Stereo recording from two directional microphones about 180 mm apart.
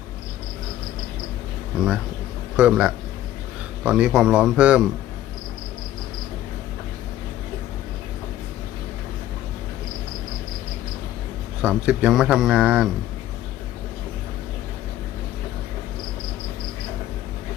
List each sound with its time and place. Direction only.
2.6 s speech: 5° right (ahead or behind)
11.6 s speech: 5° right (ahead or behind)